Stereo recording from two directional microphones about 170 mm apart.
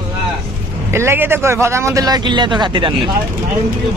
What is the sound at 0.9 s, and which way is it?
Speech, 15° right (ahead or behind).